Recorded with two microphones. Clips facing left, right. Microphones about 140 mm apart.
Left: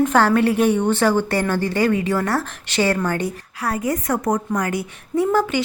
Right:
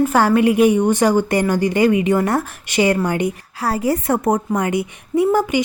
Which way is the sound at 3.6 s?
30° right (ahead or behind).